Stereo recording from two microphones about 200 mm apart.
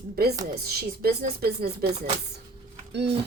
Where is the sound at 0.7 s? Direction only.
50° right (ahead or behind).